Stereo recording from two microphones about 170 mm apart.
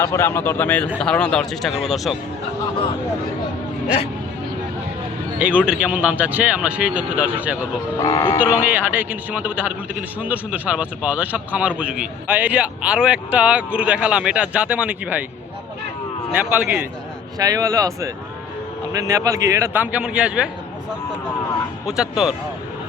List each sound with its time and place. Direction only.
0.0 s speech: 15° left (ahead or behind)
5.4 s a man's voice: 5° right (ahead or behind)
8.0 s speech: 25° left (ahead or behind)
8.4 s a man's voice: 10° right (ahead or behind)
16.3 s a man's voice: 10° right (ahead or behind)
17.3 s a man's voice: 20° right (ahead or behind); by 20.5 s 5° right (ahead or behind)
21.8 s speech: 5° right (ahead or behind)